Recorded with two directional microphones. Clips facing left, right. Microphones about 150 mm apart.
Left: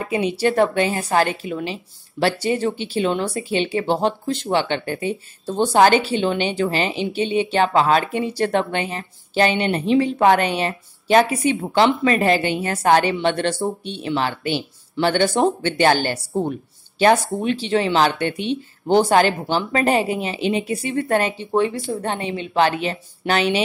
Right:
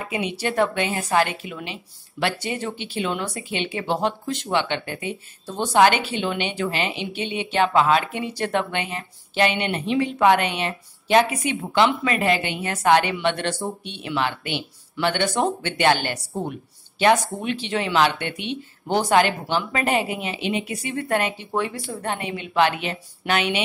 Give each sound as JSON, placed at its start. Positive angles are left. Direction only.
{"t": 0.1, "sound": "a woman's voice", "side_deg": 35}